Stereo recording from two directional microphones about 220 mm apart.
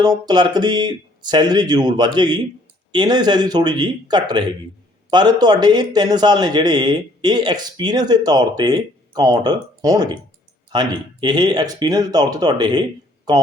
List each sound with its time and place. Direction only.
0.0 s speech: 20° right (ahead or behind)